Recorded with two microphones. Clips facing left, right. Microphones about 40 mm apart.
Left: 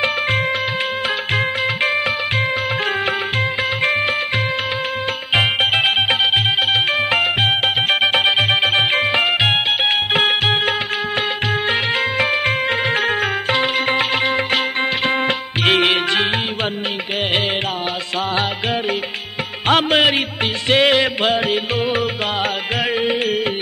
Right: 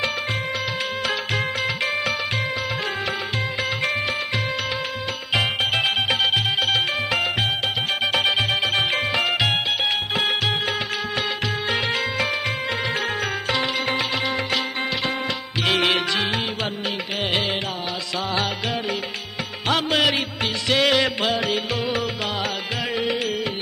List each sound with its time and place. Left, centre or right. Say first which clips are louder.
5.3 s music: left 5 dB; left
10.1 s music: left 7 dB; left
11.7 s music: left 5 dB; left
19.7 s music: left 6 dB; left